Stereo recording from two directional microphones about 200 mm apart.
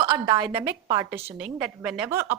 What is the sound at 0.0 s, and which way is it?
A woman's voice, 20° right (ahead or behind).